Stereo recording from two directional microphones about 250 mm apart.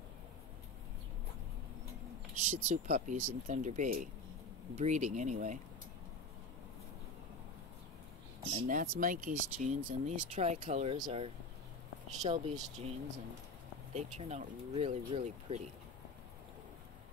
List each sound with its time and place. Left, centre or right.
2.3 s speech: right
9.0 s speech: right